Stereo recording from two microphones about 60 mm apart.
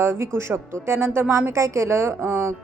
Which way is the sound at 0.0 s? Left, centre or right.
Right.